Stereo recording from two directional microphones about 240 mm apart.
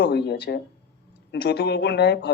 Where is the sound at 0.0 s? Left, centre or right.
Left.